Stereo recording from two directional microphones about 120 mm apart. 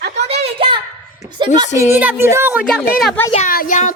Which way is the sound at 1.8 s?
20° right (ahead or behind).